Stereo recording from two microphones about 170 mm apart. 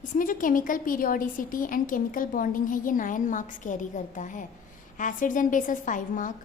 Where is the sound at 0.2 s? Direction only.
50° left (ahead or behind).